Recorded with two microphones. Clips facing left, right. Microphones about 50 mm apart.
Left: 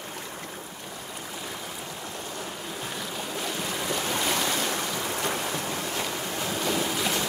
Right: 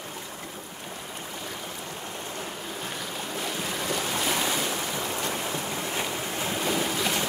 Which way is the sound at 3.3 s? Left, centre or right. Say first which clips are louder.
Even; centre.